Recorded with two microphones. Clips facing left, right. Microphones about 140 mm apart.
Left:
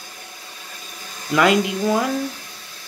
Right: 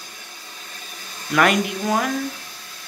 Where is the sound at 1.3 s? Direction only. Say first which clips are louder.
Left 2 dB; 20° left (ahead or behind).